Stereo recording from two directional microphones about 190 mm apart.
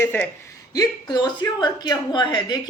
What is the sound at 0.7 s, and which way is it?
A man's voice, 20° left (ahead or behind).